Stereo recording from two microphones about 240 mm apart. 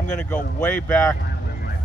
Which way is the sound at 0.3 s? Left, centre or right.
Centre.